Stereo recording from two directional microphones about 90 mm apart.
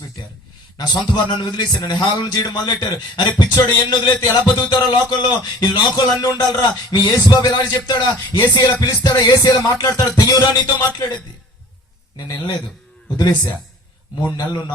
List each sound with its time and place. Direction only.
0.8 s a man's voice: 45° left (ahead or behind)
12.1 s a man's voice: 45° left (ahead or behind)